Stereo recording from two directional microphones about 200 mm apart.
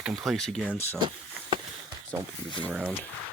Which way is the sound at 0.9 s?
25° right (ahead or behind).